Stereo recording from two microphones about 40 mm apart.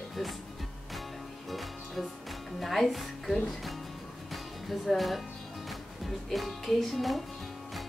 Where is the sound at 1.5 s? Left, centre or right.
Centre.